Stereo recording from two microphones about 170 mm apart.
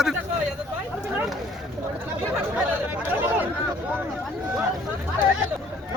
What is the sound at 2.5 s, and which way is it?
Speech, 10° right (ahead or behind).